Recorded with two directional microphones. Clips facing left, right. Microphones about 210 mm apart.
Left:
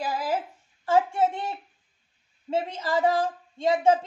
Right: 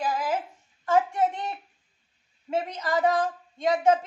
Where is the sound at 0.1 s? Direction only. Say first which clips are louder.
Even; 35° left (ahead or behind).